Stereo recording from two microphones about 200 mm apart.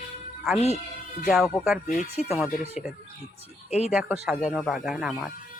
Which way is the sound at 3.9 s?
5° right (ahead or behind).